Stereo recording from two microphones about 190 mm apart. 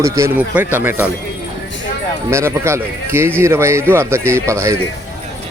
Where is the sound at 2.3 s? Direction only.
15° right (ahead or behind).